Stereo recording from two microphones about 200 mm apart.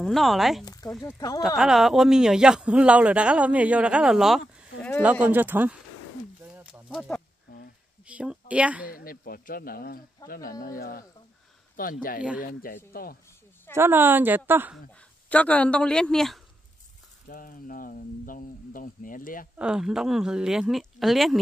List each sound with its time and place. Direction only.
0.0 s speech: centre (ahead or behind)
0.7 s a sound: 20° left (ahead or behind)
1.6 s speech: centre (ahead or behind)
6.4 s a sound: 5° right (ahead or behind)
8.1 s speech: 5° right (ahead or behind)
8.9 s speech: 45° left (ahead or behind)
13.7 s speech: 10° right (ahead or behind)
15.2 s speech: 5° left (ahead or behind)
17.3 s speech: 45° left (ahead or behind)
19.6 s speech: 5° right (ahead or behind)